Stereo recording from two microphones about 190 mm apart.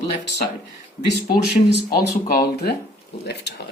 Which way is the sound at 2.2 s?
50° left (ahead or behind).